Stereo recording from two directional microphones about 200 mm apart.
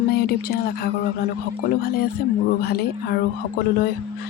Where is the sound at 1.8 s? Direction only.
50° left (ahead or behind).